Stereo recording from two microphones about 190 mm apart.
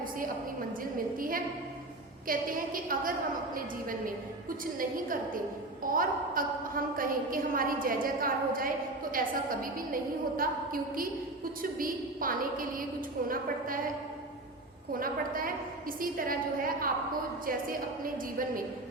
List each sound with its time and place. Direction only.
0.9 s a woman's voice: 50° right (ahead or behind)
14.9 s a woman's voice: 50° right (ahead or behind)